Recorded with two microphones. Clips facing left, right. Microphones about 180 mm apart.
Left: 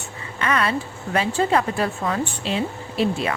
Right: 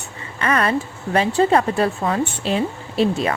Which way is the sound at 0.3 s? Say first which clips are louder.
Right 3 dB; 35° right (ahead or behind).